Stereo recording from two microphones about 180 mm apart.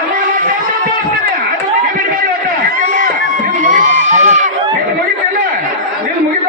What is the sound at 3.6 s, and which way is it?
Crowd, 45° right (ahead or behind).